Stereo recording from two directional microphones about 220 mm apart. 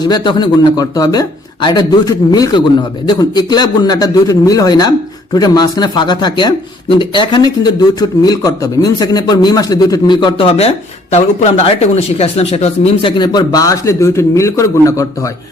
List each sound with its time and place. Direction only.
0.0 s speech: 20° left (ahead or behind)